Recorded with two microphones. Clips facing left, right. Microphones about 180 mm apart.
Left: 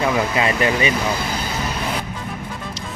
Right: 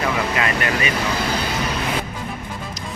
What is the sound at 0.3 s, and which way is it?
Speech, 30° left (ahead or behind).